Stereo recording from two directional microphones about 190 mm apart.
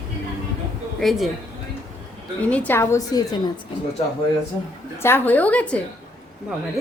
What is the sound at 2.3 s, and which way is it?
Speech, 5° left (ahead or behind).